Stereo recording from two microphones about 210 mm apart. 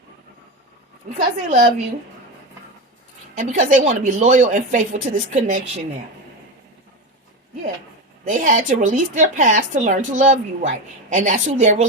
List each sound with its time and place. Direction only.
1.1 s speech: 35° right (ahead or behind)
3.3 s speech: 35° right (ahead or behind)
8.2 s speech: 35° right (ahead or behind)